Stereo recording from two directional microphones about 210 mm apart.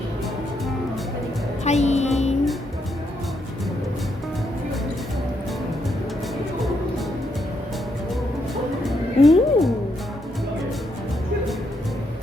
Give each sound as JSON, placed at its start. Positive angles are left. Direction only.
{"t": 1.6, "sound": "a woman's voice", "side_deg": 30}
{"t": 8.8, "sound": "music", "side_deg": 0}